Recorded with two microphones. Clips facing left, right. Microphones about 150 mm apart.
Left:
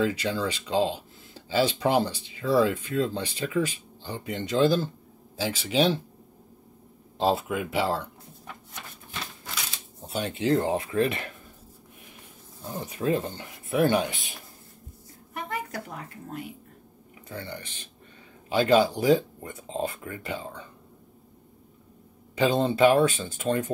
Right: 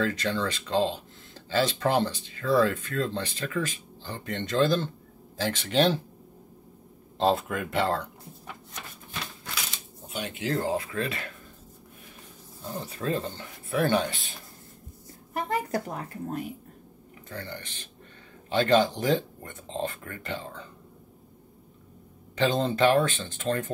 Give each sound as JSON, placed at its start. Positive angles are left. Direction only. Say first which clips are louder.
{"t": 0.0, "sound": "speech", "louder": "left 1 dB", "side_deg": 10}
{"t": 7.2, "sound": "speech", "louder": "even", "side_deg": 5}
{"t": 10.0, "sound": "speech", "louder": "left 5 dB", "side_deg": 35}
{"t": 12.7, "sound": "speech", "louder": "left 4 dB", "side_deg": 15}
{"t": 15.3, "sound": "a woman's voice", "louder": "right 5 dB", "side_deg": -35}
{"t": 17.3, "sound": "speech", "louder": "left 1 dB", "side_deg": 10}
{"t": 22.3, "sound": "speech", "louder": "left 2 dB", "side_deg": 10}